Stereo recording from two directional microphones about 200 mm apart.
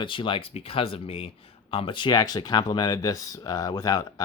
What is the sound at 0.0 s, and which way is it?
Speech, 25° left (ahead or behind).